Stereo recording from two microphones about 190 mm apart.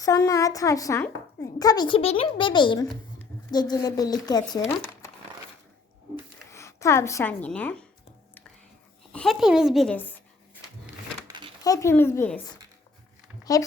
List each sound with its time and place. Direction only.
0.0 s a woman's voice: 20° left (ahead or behind)
6.5 s speech: 15° left (ahead or behind)
9.1 s speech: centre (ahead or behind)
11.3 s a sound: 25° right (ahead or behind)
11.6 s a woman's voice: 15° left (ahead or behind)
13.4 s speech: 20° left (ahead or behind)